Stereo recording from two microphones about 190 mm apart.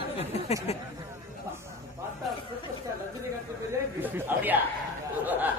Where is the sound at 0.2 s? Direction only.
35° left (ahead or behind).